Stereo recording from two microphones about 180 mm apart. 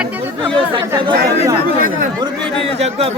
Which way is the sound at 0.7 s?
25° right (ahead or behind).